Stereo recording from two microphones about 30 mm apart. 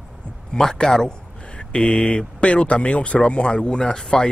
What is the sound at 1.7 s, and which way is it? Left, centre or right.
Speech, left.